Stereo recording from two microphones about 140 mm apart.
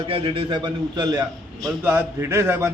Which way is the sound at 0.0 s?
40° right (ahead or behind).